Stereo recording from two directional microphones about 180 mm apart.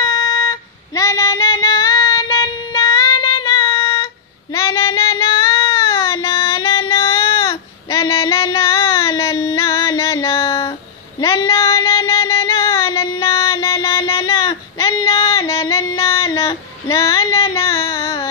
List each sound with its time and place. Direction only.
0.0 s female singing: 25° left (ahead or behind)
4.6 s child singing: 15° left (ahead or behind)
7.9 s female singing: 15° left (ahead or behind)
11.1 s a sound: 15° left (ahead or behind)